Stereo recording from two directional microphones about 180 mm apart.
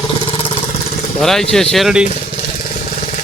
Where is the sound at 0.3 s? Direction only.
30° left (ahead or behind).